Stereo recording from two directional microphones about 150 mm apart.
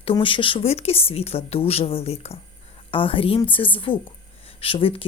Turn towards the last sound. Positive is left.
turn(degrees=35)  # may be behind; listen again after turning